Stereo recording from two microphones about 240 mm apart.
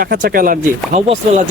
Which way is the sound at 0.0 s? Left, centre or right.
Right.